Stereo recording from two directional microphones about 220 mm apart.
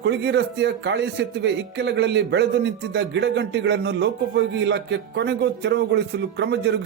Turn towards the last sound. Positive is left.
turn(degrees=-50)  # may be behind; listen again after turning